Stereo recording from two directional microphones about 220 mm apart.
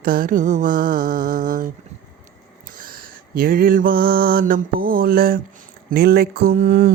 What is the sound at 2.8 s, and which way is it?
Mantra, 40° right (ahead or behind).